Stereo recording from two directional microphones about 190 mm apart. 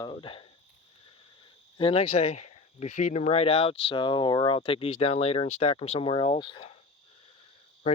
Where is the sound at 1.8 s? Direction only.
30° left (ahead or behind).